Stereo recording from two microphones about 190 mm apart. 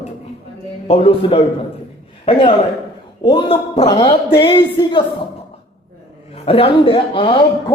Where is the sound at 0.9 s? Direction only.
30° left (ahead or behind).